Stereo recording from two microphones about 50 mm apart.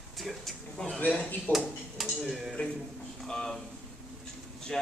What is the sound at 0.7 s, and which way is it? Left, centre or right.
Speech, centre.